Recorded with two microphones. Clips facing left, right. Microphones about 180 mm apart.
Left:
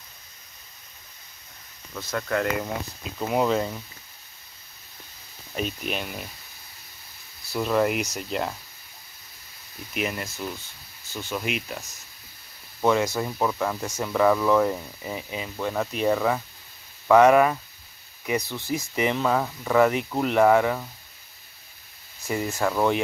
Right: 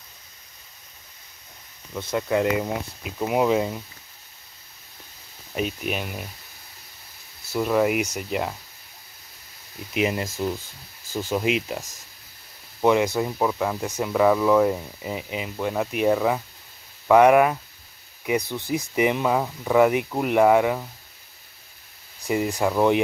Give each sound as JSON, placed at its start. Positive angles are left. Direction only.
{"t": 2.1, "sound": "speech", "side_deg": -15}
{"t": 5.6, "sound": "speech", "side_deg": -10}
{"t": 7.5, "sound": "speech", "side_deg": -5}
{"t": 9.9, "sound": "speech", "side_deg": -20}
{"t": 12.8, "sound": "speech", "side_deg": -15}
{"t": 22.3, "sound": "speech", "side_deg": -15}